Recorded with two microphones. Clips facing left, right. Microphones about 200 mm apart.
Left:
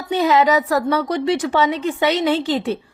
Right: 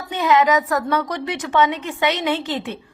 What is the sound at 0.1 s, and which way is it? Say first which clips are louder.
A woman's voice: left 2 dB; 35° left (ahead or behind).